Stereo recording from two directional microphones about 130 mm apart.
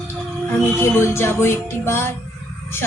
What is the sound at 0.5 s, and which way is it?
Music, 20° left (ahead or behind).